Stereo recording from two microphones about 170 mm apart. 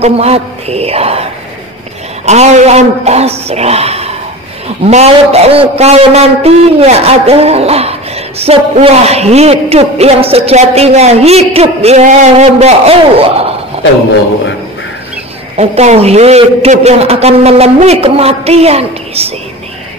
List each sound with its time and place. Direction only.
0.0 s a man's voice: 40° right (ahead or behind)
2.2 s a man's voice: 40° right (ahead or behind)
15.5 s a man's voice: 40° right (ahead or behind)